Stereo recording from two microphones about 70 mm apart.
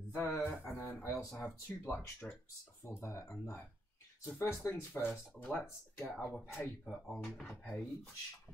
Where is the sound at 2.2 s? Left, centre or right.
Left.